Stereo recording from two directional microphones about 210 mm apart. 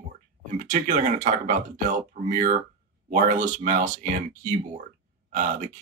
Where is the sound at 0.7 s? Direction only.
35° right (ahead or behind).